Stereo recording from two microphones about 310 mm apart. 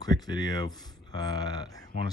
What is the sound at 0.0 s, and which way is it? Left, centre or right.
Speech, centre.